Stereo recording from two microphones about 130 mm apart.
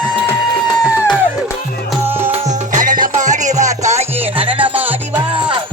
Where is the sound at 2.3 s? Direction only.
65° right (ahead or behind).